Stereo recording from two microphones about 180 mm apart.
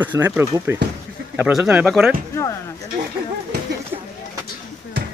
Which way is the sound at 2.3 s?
15° left (ahead or behind).